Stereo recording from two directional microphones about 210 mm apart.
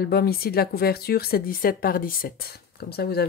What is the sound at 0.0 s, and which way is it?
A woman's voice, 45° left (ahead or behind).